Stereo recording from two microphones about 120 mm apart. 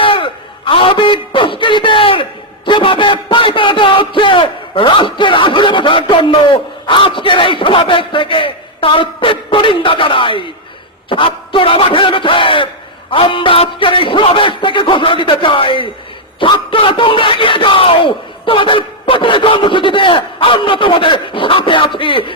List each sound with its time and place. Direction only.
0.0 s a sound: 45° left (ahead or behind)
13.1 s a man's voice: 45° left (ahead or behind)
16.4 s bellow: 45° left (ahead or behind)